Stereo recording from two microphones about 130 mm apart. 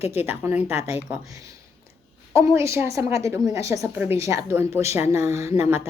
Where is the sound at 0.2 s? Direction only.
15° right (ahead or behind).